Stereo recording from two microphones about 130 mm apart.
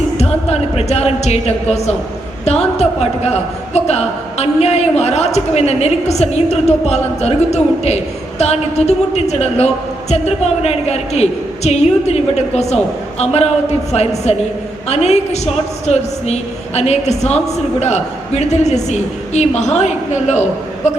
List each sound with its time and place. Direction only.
0.2 s a woman's voice: 55° left (ahead or behind)